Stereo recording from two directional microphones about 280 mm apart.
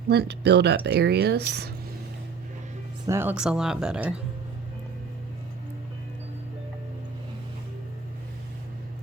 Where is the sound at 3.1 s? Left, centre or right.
Centre.